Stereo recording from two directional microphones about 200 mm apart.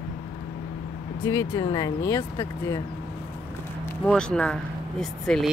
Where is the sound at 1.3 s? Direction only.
20° left (ahead or behind).